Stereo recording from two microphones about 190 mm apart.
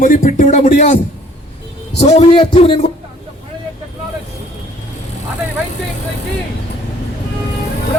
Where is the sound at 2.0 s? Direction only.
35° left (ahead or behind).